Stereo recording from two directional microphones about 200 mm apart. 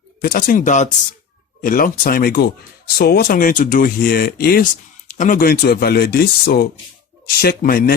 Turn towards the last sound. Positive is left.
turn(degrees=45)  # may be behind; listen again after turning